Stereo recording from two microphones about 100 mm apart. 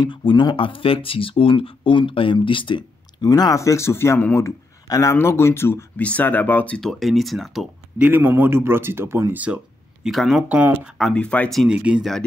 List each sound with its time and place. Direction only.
0.0 s speech: 55° left (ahead or behind)
3.3 s speech: 40° left (ahead or behind); by 6.8 s 15° left (ahead or behind)
6.8 s speech: centre (ahead or behind)
8.0 s speech: 20° right (ahead or behind)
10.0 s speech: centre (ahead or behind)
11.1 s speech: 10° left (ahead or behind)
11.6 s speech: 10° right (ahead or behind)